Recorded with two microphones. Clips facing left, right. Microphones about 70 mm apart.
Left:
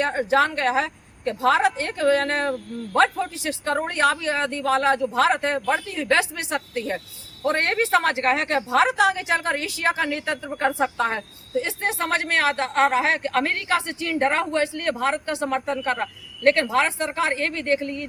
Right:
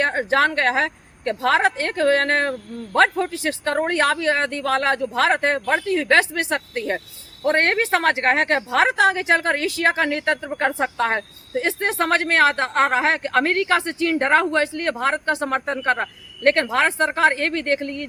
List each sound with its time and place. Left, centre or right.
0.0 s a woman's voice: right